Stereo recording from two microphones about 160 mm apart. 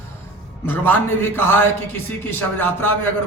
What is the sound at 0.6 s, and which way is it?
A man's voice, 15° left (ahead or behind).